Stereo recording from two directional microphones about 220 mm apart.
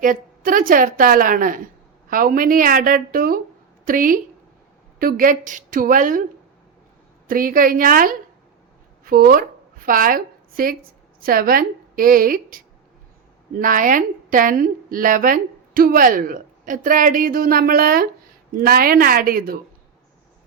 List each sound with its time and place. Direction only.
0.0 s a woman's voice: 40° right (ahead or behind)
7.3 s a woman's voice: 40° right (ahead or behind)